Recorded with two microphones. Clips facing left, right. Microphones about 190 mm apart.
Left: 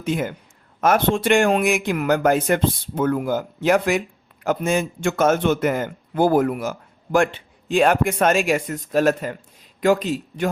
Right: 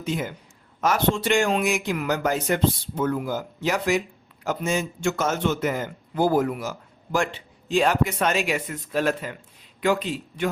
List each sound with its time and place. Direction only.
0.0 s speech: 55° left (ahead or behind)